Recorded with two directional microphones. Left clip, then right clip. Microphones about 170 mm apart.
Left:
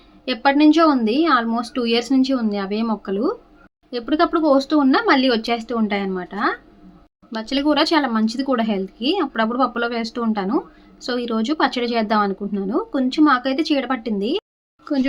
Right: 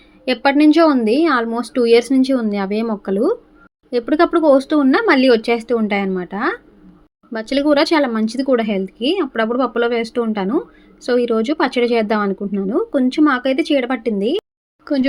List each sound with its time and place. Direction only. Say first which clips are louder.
0.3 s a woman's voice: right 2 dB; 30° right (ahead or behind)